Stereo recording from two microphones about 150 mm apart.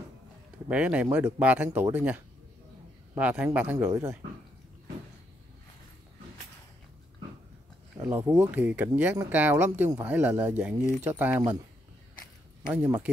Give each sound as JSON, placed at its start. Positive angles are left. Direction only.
{"t": 0.7, "sound": "speech", "side_deg": -10}
{"t": 3.7, "sound": "speech", "side_deg": -20}
{"t": 8.0, "sound": "speech", "side_deg": -15}
{"t": 12.7, "sound": "speech", "side_deg": -15}